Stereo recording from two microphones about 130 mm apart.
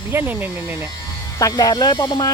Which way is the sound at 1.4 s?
30° left (ahead or behind).